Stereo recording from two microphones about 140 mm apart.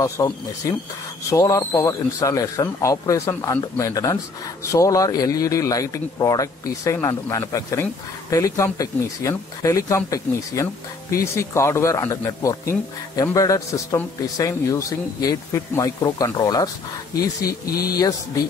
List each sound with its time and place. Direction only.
0.0 s speech: 25° left (ahead or behind)